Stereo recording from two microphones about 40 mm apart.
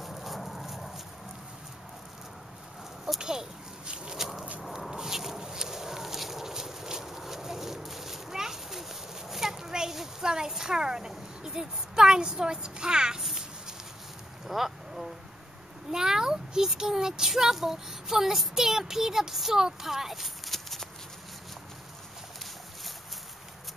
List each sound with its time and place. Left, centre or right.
0.0 s horse: centre
3.2 s speech: centre
4.9 s a sound: centre
10.5 s speech: centre
13.2 s a sound: centre
14.5 s speech: centre